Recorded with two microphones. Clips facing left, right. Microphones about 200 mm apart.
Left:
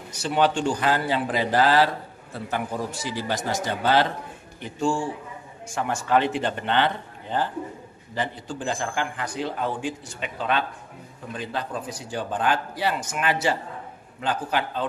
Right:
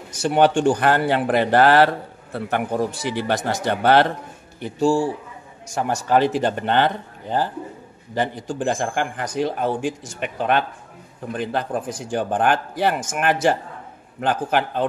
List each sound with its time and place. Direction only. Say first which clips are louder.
0.2 s speech: right 6 dB; 50° right (ahead or behind)
4.7 s speech: right 6 dB; 35° right (ahead or behind)
8.6 s a man's voice: right 5 dB; 50° right (ahead or behind)
10.0 s a man's voice: right 5 dB; 55° right (ahead or behind)